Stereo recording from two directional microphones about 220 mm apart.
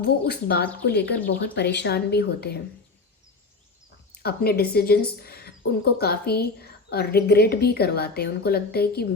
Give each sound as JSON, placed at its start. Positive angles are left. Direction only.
{"t": 0.0, "sound": "a woman's voice", "side_deg": 45}
{"t": 4.1, "sound": "a woman's voice", "side_deg": 45}